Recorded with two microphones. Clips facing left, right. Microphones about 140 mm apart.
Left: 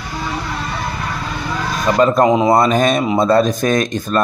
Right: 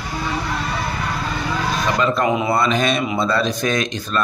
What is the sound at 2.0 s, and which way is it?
Speech, 45° left (ahead or behind).